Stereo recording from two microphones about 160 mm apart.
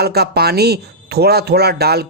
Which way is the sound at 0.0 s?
85° right.